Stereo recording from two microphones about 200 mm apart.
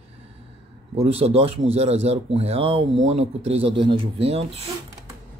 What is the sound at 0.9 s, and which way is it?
Speech, 30° right (ahead or behind).